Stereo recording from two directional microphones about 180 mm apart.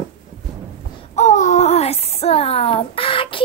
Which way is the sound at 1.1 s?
40° left (ahead or behind).